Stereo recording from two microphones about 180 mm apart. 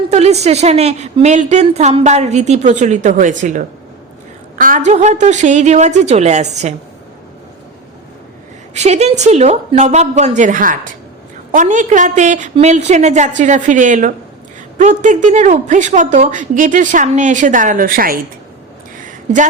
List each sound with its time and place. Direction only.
0.1 s a woman's voice: 35° right (ahead or behind)
8.7 s a woman's voice: 35° right (ahead or behind); by 18.2 s 55° right (ahead or behind)
18.9 s a sound: 45° right (ahead or behind)